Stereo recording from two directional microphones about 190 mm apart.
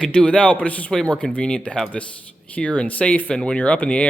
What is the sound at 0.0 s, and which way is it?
Speech, 5° left (ahead or behind).